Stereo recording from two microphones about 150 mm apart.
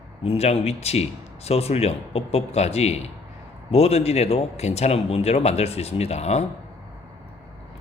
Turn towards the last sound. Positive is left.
turn(degrees=45)  # may be behind; listen again after turning